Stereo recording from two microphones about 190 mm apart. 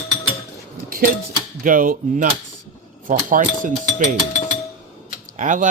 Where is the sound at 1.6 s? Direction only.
45° right (ahead or behind).